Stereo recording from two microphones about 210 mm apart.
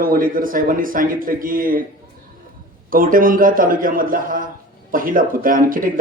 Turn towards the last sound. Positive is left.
turn(degrees=-40)  # may be behind; listen again after turning